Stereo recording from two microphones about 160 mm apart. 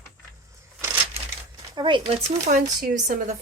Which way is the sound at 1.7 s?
30° right (ahead or behind).